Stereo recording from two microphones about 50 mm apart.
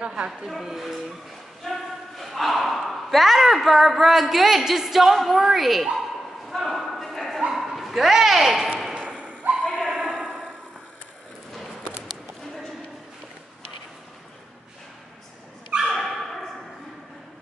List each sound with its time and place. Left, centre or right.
0.0 s speech: centre
0.5 s speech: centre
6.5 s a sound: centre
7.5 s dog: centre
8.9 s thump: right
9.6 s a sound: centre
15.9 s dog: centre